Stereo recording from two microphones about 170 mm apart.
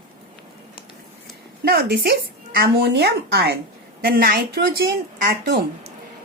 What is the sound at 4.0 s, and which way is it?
A woman's voice, 60° right (ahead or behind).